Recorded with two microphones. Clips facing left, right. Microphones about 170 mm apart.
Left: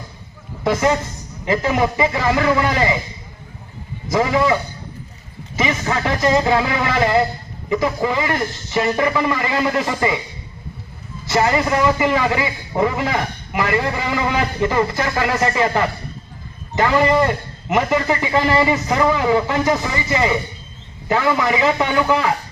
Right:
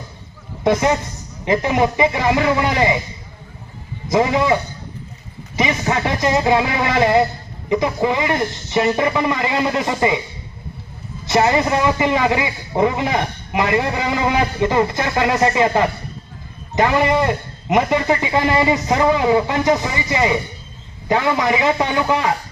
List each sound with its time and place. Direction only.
0.6 s a man's voice: 20° right (ahead or behind)
4.1 s a man's voice: 20° right (ahead or behind)
5.5 s a man's voice: 20° right (ahead or behind)
11.3 s a man's voice: 20° right (ahead or behind)